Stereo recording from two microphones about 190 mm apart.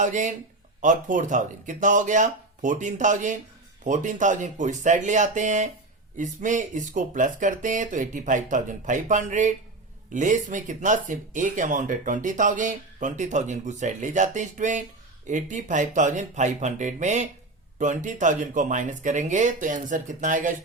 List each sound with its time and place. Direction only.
0.0 s speech: 40° right (ahead or behind)